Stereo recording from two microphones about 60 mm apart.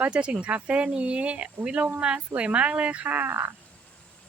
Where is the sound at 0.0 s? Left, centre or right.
Centre; by 3.5 s right.